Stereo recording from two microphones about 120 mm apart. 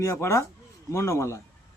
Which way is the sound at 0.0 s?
25° left (ahead or behind).